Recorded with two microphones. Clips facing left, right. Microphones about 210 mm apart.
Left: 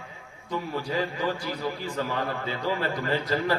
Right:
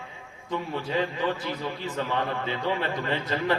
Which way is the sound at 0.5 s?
20° right (ahead or behind).